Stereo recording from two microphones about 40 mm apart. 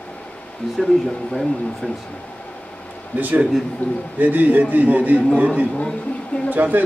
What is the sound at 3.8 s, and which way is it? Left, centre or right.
Speech, left.